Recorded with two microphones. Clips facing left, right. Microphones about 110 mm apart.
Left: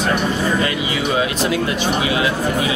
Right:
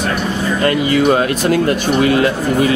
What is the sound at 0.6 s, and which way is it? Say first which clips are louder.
Speech: right 8 dB; 50° right (ahead or behind).